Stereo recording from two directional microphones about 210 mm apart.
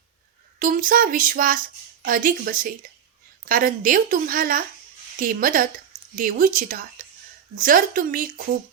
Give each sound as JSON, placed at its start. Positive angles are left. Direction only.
{"t": 0.6, "sound": "speech", "side_deg": -40}